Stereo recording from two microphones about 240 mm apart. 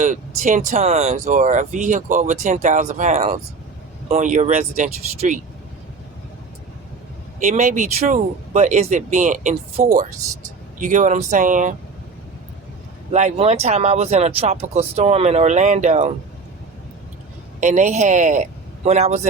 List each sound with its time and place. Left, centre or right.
0.0 s speech: right
7.3 s speech: right
13.1 s speech: right
17.6 s speech: right